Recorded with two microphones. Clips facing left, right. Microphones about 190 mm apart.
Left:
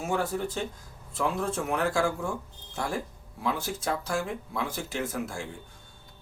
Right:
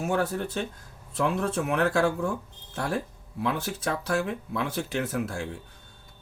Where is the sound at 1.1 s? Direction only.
65° right (ahead or behind).